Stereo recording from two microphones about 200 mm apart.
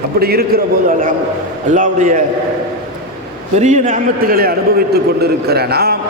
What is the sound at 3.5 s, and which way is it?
A man's voice, 35° right (ahead or behind).